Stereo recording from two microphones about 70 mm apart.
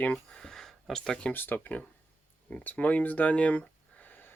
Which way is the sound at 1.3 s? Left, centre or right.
Left.